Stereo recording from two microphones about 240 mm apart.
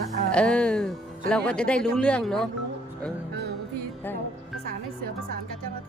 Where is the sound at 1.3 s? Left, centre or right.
Centre.